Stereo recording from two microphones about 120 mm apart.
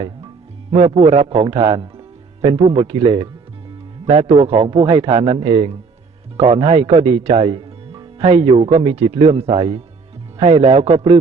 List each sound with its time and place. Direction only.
0.7 s speech: 50° right (ahead or behind)
4.0 s speech: 55° right (ahead or behind)